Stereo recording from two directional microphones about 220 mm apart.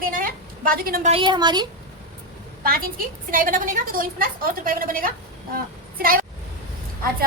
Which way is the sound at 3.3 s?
40° right (ahead or behind).